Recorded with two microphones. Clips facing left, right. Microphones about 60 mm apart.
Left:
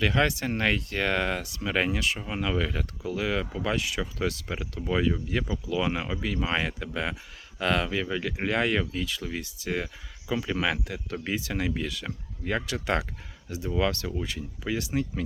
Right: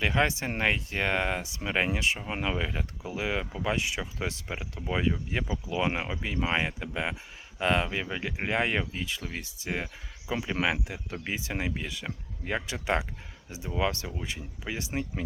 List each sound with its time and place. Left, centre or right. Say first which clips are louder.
0.0 s speech: left 2 dB; right